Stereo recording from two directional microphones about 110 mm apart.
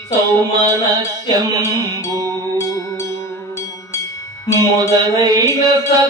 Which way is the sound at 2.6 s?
30° left (ahead or behind).